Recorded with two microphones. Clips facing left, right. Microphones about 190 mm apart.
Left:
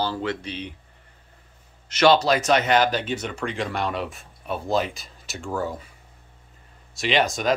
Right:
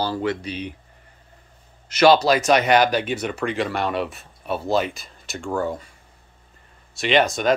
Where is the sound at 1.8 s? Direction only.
10° right (ahead or behind).